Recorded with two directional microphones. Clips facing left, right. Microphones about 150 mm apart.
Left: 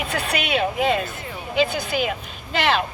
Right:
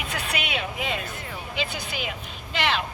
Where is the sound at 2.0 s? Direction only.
45° left (ahead or behind).